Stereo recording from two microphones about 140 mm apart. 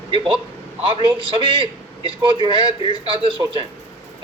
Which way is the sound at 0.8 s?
35° right (ahead or behind).